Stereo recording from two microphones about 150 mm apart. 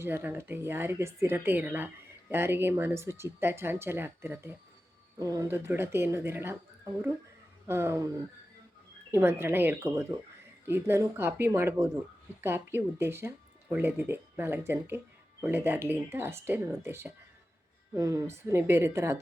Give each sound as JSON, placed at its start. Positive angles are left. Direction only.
{"t": 0.0, "sound": "speech", "side_deg": -15}
{"t": 7.7, "sound": "speech", "side_deg": -15}
{"t": 9.1, "sound": "speech", "side_deg": -15}